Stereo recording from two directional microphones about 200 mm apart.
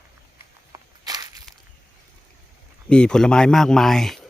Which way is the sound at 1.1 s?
20° right (ahead or behind).